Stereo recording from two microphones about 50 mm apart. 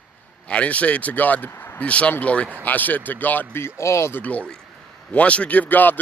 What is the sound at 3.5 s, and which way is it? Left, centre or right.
Speech, left.